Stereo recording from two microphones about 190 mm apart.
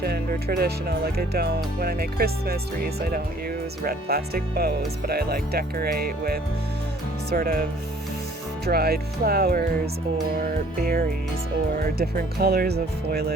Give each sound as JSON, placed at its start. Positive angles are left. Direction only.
{"t": 0.0, "sound": "speech", "side_deg": -55}